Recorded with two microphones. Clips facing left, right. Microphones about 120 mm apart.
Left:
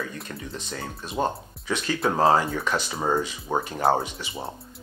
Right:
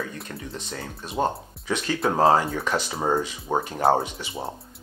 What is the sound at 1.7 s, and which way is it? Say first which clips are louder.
Speech: right 1 dB; 40° right (ahead or behind).